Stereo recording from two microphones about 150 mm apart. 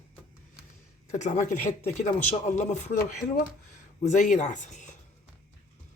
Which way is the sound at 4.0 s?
55° left (ahead or behind).